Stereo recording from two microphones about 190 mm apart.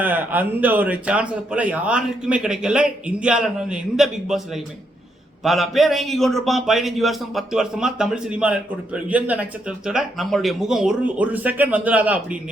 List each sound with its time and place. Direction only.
0.0 s a man's voice: 10° right (ahead or behind)